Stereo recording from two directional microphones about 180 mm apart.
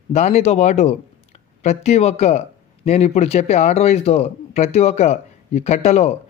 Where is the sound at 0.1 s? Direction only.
35° left (ahead or behind).